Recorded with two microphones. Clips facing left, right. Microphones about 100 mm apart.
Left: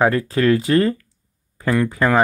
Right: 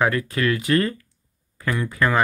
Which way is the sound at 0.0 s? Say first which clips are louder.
Left 5 dB; 30° left (ahead or behind).